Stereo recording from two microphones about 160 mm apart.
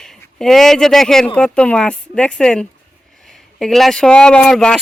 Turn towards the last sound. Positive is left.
turn(degrees=5)  # may be behind; listen again after turning